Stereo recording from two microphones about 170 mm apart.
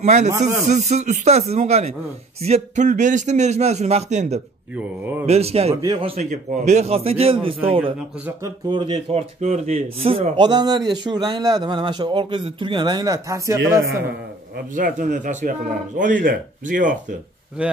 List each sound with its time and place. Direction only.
0.0 s a man's voice: 40° right (ahead or behind)
4.7 s speech: 10° right (ahead or behind)
5.2 s a man's voice: 35° right (ahead or behind)
5.8 s a man's voice: 25° right (ahead or behind)
9.4 s a man's voice: 40° right (ahead or behind)
10.4 s a man's voice: 25° right (ahead or behind)
14.8 s a man's voice: 45° right (ahead or behind)
17.6 s speech: 5° right (ahead or behind)